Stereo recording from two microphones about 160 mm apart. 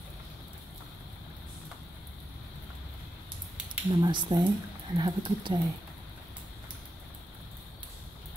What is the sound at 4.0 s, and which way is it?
Speech, 30° right (ahead or behind).